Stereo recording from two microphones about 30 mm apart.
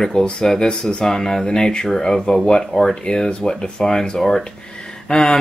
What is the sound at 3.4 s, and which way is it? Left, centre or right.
Speech, left.